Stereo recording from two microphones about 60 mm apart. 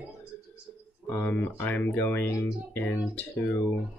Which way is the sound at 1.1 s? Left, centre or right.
Left.